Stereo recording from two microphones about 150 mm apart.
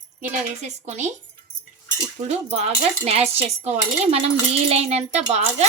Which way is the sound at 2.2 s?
45° right (ahead or behind).